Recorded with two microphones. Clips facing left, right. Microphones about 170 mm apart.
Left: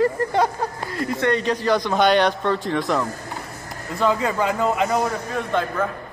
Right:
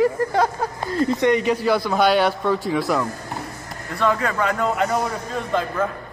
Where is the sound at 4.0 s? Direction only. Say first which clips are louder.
Left 1 dB; 15° left (ahead or behind); by 5.9 s centre (ahead or behind).